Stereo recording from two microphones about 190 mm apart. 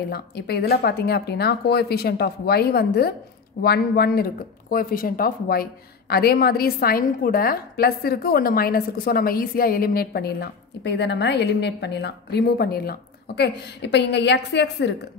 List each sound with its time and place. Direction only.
0.1 s speech: 55° left (ahead or behind)